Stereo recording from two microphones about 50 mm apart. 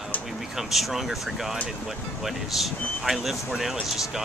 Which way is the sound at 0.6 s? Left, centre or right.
Centre.